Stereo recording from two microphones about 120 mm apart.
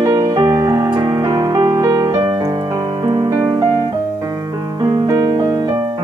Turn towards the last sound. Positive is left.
turn(degrees=-35)  # may be behind; listen again after turning